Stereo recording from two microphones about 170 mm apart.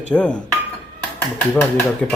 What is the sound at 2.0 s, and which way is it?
Speech, 5° left (ahead or behind).